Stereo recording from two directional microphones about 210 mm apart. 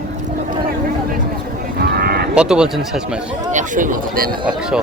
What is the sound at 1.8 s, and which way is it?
Cattle, 45° right (ahead or behind).